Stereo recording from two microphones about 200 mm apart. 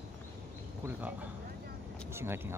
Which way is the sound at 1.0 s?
10° right (ahead or behind).